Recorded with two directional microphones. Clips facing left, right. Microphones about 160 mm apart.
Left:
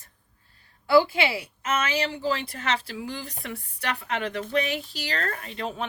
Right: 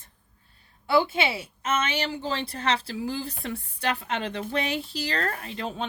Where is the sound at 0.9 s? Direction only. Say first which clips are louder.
Left 3 dB; 20° right (ahead or behind).